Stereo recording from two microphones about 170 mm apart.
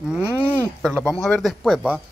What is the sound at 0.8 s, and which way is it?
A man's voice, centre (ahead or behind).